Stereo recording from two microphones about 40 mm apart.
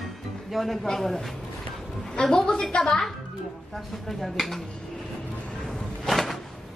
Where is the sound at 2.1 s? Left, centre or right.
Centre.